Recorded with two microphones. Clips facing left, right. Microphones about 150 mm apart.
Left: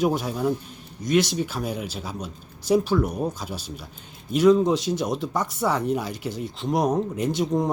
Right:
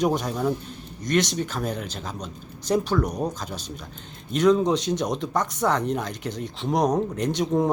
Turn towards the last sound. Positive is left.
turn(degrees=0)  # may be behind; listen again after turning